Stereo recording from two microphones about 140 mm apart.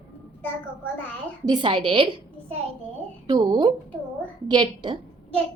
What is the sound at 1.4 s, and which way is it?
A woman's voice, 35° right (ahead or behind).